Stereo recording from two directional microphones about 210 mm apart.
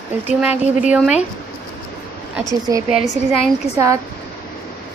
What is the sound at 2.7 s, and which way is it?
Speech, 15° right (ahead or behind).